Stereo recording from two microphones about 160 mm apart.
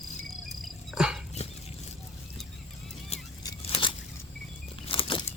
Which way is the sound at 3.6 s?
35° left (ahead or behind).